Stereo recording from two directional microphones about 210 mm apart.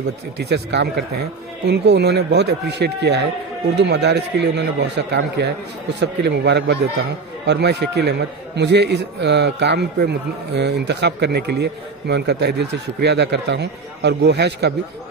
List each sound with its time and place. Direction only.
0.4 s a man's voice: 55° right (ahead or behind)